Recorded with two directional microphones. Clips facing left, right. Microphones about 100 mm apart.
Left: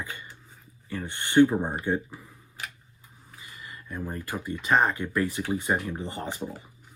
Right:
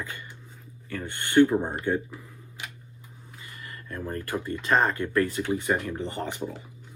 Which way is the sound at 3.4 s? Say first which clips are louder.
Right 1 dB; 15° left (ahead or behind).